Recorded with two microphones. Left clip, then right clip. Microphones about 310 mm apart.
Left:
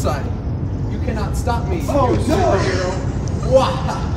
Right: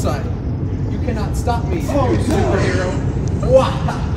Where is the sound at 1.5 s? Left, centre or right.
Centre.